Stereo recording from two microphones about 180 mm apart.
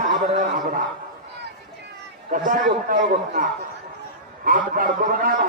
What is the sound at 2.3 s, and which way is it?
A man's voice, 50° right (ahead or behind).